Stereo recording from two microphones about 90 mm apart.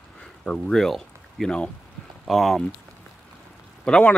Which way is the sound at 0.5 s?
5° left (ahead or behind).